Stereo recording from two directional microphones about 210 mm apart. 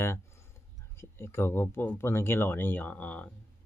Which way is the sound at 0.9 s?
10° left (ahead or behind).